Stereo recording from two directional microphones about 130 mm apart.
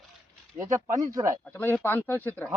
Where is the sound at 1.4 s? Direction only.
15° left (ahead or behind).